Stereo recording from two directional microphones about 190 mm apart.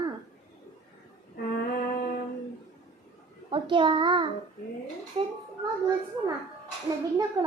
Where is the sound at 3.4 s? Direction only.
25° right (ahead or behind).